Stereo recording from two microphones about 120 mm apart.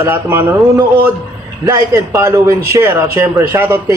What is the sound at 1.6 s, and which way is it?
A man's voice, 25° right (ahead or behind).